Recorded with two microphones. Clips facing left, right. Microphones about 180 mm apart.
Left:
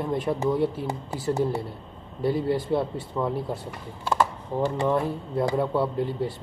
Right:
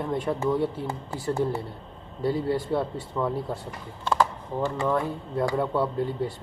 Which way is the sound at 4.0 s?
10° left (ahead or behind).